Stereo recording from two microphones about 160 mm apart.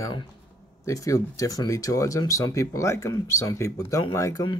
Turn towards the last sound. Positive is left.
turn(degrees=20)  # may be behind; listen again after turning